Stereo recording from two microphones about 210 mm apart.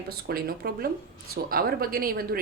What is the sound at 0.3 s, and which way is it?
Speech, 45° right (ahead or behind).